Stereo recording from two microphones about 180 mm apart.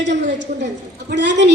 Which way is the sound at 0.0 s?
85° right.